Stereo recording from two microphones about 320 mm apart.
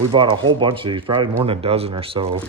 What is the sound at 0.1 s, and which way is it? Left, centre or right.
Speech, centre.